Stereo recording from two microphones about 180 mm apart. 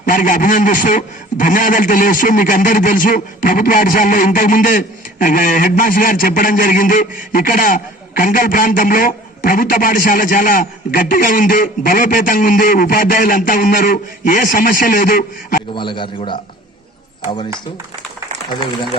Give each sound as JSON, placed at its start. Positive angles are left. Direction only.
{"t": 0.0, "sound": "a man's voice", "side_deg": 50}
{"t": 15.7, "sound": "a man's voice", "side_deg": 25}